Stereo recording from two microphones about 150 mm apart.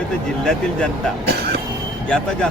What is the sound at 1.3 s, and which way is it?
Vehicle, 90° right.